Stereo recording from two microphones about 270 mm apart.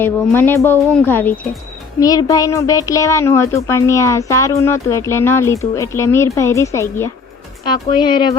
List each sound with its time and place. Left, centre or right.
0.0 s a child's voice: centre